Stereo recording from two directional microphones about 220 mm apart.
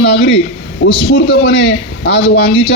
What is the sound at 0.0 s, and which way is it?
A man's voice, 50° left (ahead or behind).